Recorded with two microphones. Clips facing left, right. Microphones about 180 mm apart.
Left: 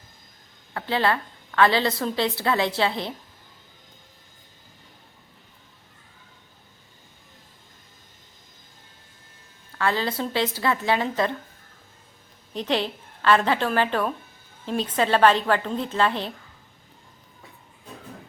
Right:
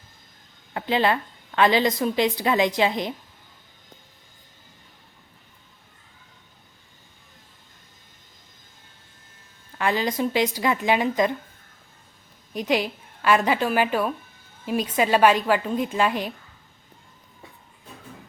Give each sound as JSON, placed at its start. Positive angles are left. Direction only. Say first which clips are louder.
{"t": 0.7, "sound": "a woman's voice", "louder": "right 2 dB", "side_deg": -15}
{"t": 9.7, "sound": "a woman's voice", "louder": "right 1 dB", "side_deg": -15}
{"t": 12.5, "sound": "a woman's voice", "louder": "right 1 dB", "side_deg": -10}